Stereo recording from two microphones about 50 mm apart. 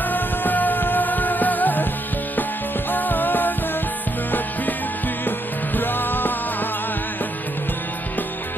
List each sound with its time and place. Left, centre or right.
0.1 s music: left
2.9 s music: left
5.8 s music: left